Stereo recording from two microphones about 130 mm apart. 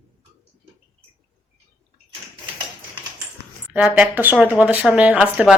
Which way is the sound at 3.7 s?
10° right (ahead or behind).